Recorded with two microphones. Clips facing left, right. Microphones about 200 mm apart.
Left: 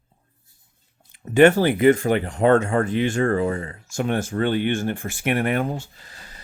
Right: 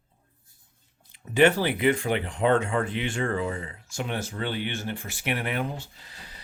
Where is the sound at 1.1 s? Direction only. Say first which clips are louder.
Left 6 dB; 50° left (ahead or behind).